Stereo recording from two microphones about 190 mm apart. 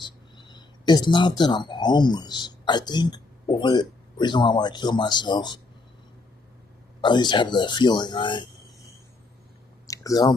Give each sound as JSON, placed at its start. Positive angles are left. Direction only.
{"t": 0.0, "sound": "speech", "side_deg": 25}
{"t": 7.0, "sound": "speech", "side_deg": 25}
{"t": 9.8, "sound": "a sound", "side_deg": 15}